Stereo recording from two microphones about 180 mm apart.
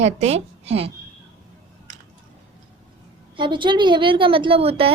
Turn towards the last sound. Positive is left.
turn(degrees=-30)  # may be behind; listen again after turning